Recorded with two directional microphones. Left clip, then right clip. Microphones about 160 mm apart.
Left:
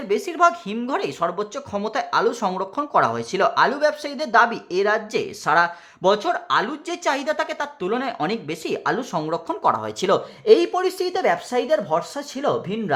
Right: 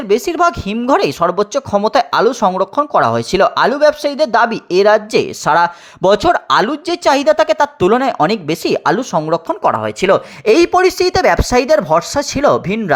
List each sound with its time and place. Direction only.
0.1 s speech: 40° right (ahead or behind)
9.1 s speech: 30° right (ahead or behind)